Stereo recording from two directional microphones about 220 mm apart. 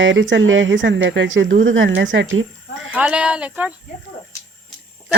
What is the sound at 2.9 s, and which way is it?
Speech, 5° right (ahead or behind).